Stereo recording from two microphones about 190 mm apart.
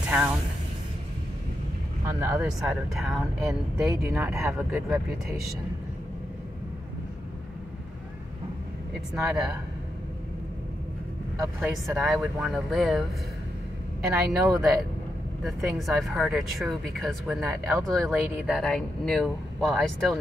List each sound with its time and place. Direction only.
2.0 s speech: 15° right (ahead or behind)
9.1 s speech: 5° right (ahead or behind)
11.4 s speech: 10° right (ahead or behind)
14.1 s speech: 15° right (ahead or behind)
14.6 s speech: centre (ahead or behind)